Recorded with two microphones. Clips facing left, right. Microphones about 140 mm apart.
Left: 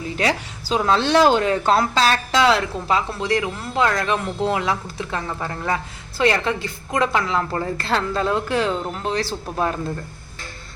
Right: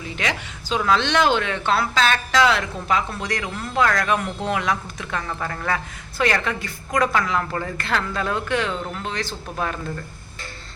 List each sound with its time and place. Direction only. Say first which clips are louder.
0.2 s speech: left 5 dB; 35° left (ahead or behind)